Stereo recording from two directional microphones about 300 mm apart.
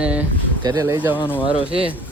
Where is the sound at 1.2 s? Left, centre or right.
Centre.